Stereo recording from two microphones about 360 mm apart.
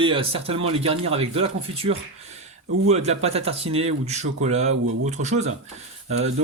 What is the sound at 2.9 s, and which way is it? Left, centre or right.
Speech, centre.